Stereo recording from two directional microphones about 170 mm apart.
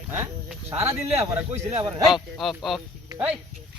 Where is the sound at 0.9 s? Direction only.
40° right (ahead or behind).